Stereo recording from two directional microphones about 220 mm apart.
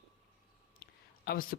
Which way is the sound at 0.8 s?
45° left (ahead or behind).